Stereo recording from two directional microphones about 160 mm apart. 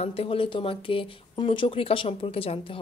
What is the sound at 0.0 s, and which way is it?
Speech, 40° left (ahead or behind).